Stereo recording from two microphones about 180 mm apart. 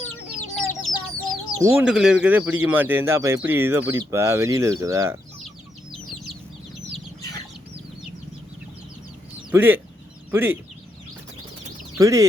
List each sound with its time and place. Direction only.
0.5 s chicken: centre (ahead or behind)
1.6 s speech: 10° right (ahead or behind)
9.5 s speech: 10° right (ahead or behind)
11.9 s speech: 20° right (ahead or behind)